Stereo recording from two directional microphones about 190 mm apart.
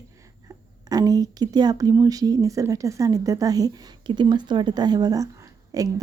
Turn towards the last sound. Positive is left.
turn(degrees=-20)  # may be behind; listen again after turning